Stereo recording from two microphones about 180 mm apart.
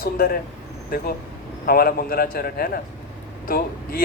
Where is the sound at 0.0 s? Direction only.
55° left (ahead or behind).